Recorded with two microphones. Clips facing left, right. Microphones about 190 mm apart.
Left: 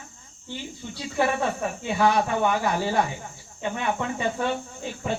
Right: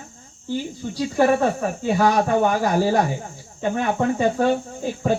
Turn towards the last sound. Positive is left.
turn(degrees=-45)  # may be behind; listen again after turning